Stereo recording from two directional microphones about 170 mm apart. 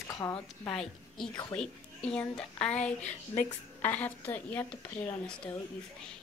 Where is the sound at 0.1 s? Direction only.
15° left (ahead or behind).